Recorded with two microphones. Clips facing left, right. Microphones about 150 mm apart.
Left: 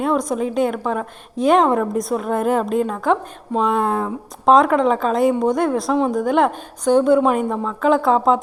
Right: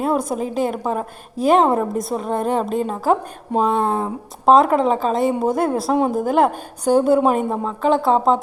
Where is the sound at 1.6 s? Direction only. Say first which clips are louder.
Even; 30° right (ahead or behind).